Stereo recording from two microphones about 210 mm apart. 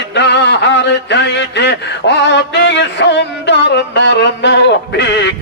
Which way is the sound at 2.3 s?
55° left (ahead or behind).